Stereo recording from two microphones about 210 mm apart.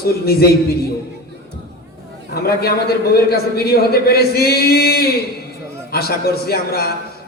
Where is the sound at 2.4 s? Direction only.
45° left (ahead or behind).